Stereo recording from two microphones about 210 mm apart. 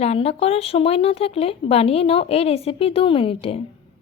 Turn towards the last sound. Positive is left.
turn(degrees=25)  # may be behind; listen again after turning